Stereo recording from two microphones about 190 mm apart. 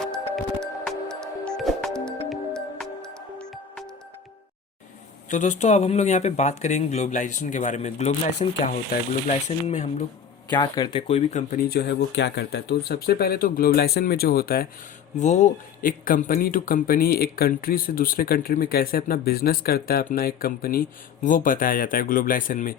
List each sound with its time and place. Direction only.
0.6 s music: 5° left (ahead or behind)
5.3 s speech: 40° left (ahead or behind)
10.5 s speech: 25° left (ahead or behind)
11.1 s speech: 40° left (ahead or behind)
15.2 s speech: 40° left (ahead or behind)